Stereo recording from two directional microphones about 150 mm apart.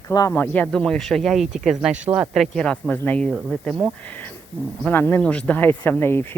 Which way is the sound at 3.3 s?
5° right (ahead or behind).